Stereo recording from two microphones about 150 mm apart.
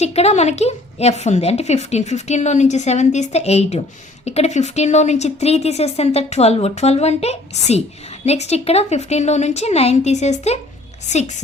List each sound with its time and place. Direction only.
0.0 s a woman's voice: 45° left (ahead or behind)